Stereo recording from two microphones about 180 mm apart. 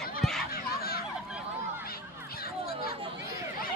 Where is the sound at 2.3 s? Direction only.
55° left (ahead or behind).